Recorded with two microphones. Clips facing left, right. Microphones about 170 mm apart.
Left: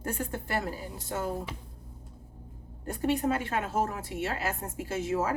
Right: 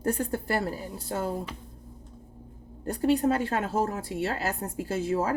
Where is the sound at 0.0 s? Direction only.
35° right (ahead or behind).